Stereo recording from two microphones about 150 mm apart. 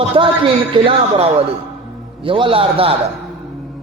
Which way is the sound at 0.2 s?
35° right (ahead or behind).